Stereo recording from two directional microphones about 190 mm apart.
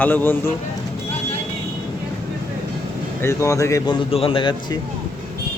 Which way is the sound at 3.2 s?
15° left (ahead or behind).